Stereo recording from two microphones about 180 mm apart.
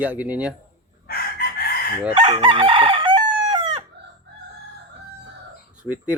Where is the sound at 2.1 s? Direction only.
25° right (ahead or behind).